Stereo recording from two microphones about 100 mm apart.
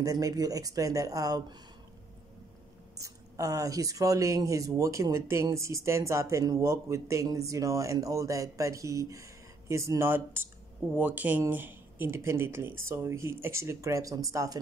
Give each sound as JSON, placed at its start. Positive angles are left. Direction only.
{"t": 0.0, "sound": "speech", "side_deg": -35}
{"t": 3.0, "sound": "speech", "side_deg": -35}